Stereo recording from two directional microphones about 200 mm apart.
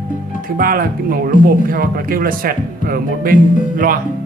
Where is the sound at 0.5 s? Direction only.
45° right (ahead or behind).